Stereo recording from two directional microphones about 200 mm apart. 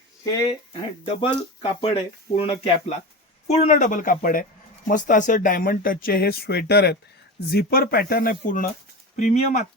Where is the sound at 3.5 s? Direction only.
35° left (ahead or behind).